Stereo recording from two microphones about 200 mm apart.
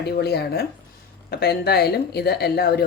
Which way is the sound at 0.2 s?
50° left (ahead or behind).